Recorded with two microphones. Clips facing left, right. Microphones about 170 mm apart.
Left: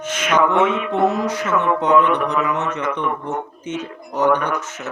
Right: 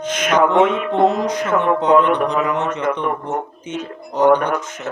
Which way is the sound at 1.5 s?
55° right (ahead or behind).